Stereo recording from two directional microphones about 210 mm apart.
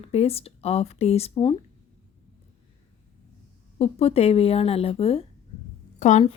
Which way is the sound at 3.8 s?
30° left (ahead or behind).